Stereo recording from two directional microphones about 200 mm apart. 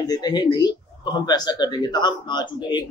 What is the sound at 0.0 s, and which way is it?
Speech, 20° left (ahead or behind).